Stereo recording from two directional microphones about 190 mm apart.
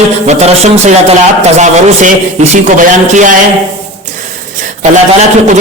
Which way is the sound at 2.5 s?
40° right (ahead or behind).